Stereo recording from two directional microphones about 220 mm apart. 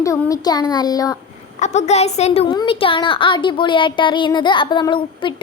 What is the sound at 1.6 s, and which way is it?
A woman's voice, 30° left (ahead or behind).